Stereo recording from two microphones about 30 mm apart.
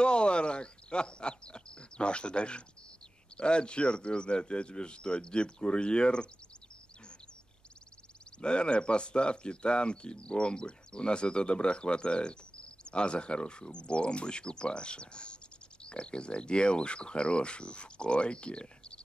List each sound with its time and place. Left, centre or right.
0.0 s a sound: left
3.3 s speech: left
8.4 s speech: left